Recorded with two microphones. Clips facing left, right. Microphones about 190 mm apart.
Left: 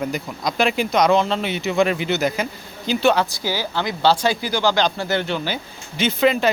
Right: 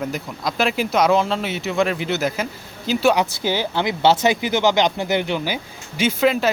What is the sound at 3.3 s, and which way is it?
Speech, 20° right (ahead or behind).